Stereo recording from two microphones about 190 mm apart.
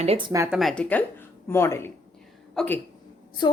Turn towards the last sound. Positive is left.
turn(degrees=25)  # may be behind; listen again after turning